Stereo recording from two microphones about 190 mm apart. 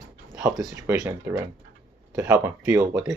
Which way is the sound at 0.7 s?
15° right (ahead or behind).